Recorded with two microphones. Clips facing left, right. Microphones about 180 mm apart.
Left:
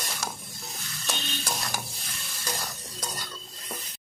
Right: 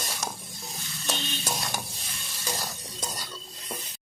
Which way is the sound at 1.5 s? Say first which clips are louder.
Right 1 dB; centre (ahead or behind).